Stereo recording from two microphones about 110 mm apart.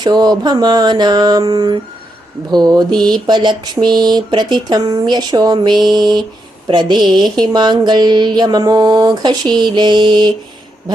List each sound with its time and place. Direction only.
0.0 s a woman's voice: 40° right (ahead or behind)